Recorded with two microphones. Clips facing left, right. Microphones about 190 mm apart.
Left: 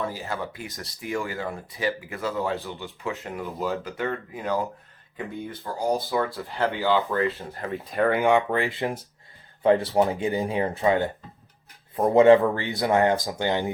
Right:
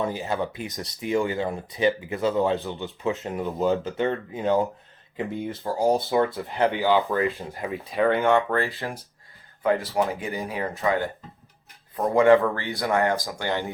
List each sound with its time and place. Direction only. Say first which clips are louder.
0.0 s speech: right 4 dB; 20° right (ahead or behind)
7.7 s speech: right 1 dB; centre (ahead or behind)
8.2 s speech: even; 15° left (ahead or behind)
9.6 s speech: left 3 dB; 30° left (ahead or behind)